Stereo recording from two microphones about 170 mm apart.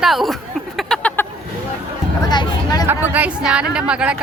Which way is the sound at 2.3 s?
25° left (ahead or behind).